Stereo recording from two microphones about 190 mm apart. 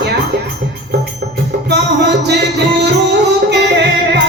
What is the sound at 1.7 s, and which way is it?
Music, 65° right (ahead or behind).